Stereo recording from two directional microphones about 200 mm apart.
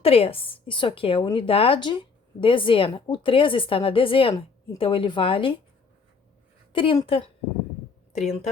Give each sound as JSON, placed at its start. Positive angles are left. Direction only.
{"t": 0.0, "sound": "a woman's voice", "side_deg": 30}
{"t": 6.7, "sound": "a woman's voice", "side_deg": 25}